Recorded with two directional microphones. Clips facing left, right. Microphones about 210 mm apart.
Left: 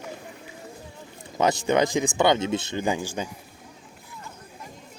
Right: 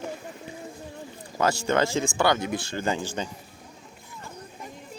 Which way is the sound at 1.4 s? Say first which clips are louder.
Left 2 dB; 20° left (ahead or behind).